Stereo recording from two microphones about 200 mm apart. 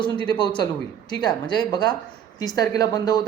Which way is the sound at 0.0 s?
25° left (ahead or behind).